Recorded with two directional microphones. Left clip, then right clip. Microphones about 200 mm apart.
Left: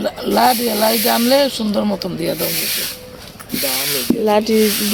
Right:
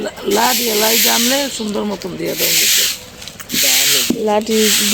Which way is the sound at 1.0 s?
55° left (ahead or behind).